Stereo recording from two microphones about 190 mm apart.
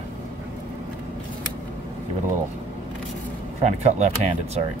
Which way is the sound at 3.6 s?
35° right (ahead or behind).